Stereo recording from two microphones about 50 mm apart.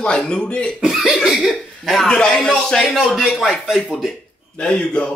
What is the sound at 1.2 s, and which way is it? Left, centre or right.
Speech, centre.